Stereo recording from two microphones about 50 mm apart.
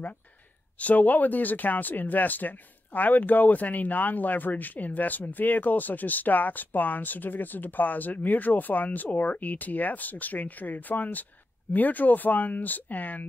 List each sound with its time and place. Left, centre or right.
0.7 s speech: left